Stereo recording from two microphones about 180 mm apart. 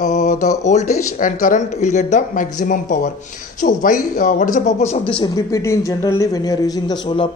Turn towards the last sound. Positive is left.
turn(degrees=25)  # may be behind; listen again after turning